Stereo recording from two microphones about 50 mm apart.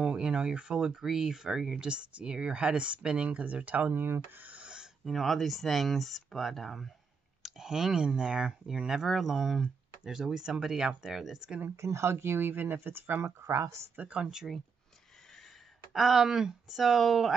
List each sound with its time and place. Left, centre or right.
0.0 s speech: centre
5.0 s speech: centre
7.4 s speech: centre
9.1 s speech: centre
11.7 s speech: right
13.2 s speech: right
13.9 s speech: right
14.2 s speech: centre
15.9 s speech: centre